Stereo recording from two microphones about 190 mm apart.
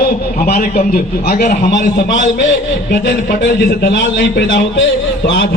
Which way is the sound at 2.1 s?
75° left (ahead or behind).